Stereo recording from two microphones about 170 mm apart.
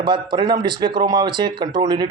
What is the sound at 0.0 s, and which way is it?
Speech, 25° right (ahead or behind).